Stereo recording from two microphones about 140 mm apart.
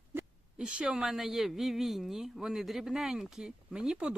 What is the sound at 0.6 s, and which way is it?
Speech, 5° right (ahead or behind).